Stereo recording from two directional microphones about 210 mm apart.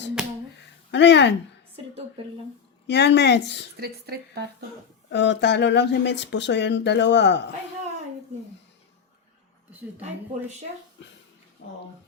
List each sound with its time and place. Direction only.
0.9 s speech: 55° left (ahead or behind)
2.8 s a woman's voice: 55° left (ahead or behind)
3.8 s a woman's voice: 50° right (ahead or behind)
5.1 s speech: 55° left (ahead or behind)
11.0 s speech: 55° left (ahead or behind)
11.6 s speech: 45° left (ahead or behind)